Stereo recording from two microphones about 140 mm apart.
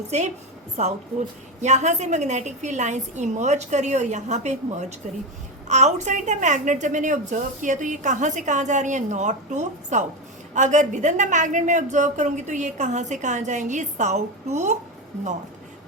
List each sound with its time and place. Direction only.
0.1 s a woman's voice: 55° right (ahead or behind)